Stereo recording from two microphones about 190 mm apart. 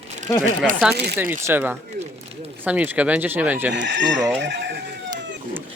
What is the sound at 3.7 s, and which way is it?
Speech, 70° right (ahead or behind).